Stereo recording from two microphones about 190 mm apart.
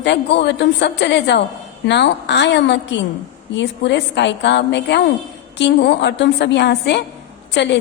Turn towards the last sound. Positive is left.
turn(degrees=65)  # may be behind; listen again after turning